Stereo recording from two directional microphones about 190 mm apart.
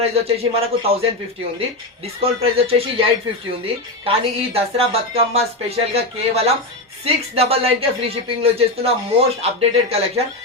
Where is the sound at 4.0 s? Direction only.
30° right (ahead or behind).